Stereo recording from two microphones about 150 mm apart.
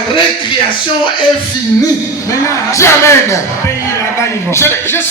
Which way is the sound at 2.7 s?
20° left (ahead or behind).